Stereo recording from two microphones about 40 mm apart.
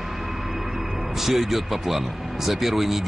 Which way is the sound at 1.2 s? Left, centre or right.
Centre.